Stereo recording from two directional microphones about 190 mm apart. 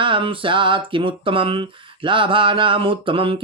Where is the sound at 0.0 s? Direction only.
25° right (ahead or behind).